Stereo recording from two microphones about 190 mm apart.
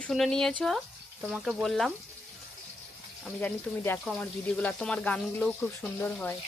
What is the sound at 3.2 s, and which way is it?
Speech, 5° left (ahead or behind).